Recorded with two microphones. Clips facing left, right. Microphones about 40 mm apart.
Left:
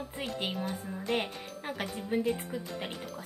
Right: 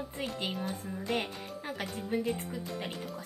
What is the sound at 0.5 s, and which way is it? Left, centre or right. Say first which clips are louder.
Speech: left 1 dB; centre.